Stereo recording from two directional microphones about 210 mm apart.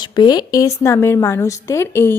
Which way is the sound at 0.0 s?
20° left (ahead or behind).